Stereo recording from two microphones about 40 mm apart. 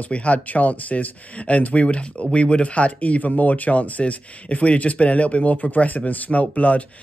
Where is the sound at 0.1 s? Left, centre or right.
Left.